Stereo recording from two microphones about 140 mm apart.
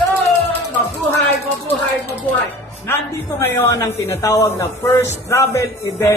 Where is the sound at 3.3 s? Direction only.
20° left (ahead or behind).